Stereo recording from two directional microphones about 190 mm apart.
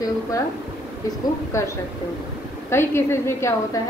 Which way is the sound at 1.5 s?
15° left (ahead or behind).